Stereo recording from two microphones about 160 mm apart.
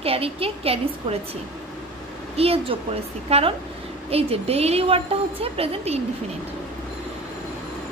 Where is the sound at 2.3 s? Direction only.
35° right (ahead or behind).